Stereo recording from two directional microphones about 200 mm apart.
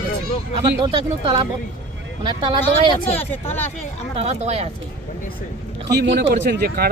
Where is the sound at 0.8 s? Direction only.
25° right (ahead or behind).